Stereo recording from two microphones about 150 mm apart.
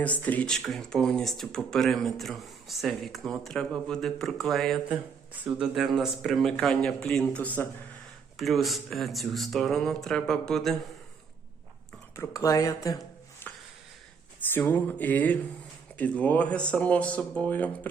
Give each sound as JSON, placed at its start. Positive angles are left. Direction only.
{"t": 0.0, "sound": "speech", "side_deg": 10}
{"t": 5.4, "sound": "speech", "side_deg": -10}
{"t": 12.1, "sound": "speech", "side_deg": 20}
{"t": 13.4, "sound": "music", "side_deg": 15}
{"t": 14.3, "sound": "speech", "side_deg": 10}